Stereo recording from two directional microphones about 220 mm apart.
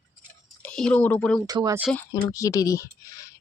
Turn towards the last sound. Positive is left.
turn(degrees=15)  # may be behind; listen again after turning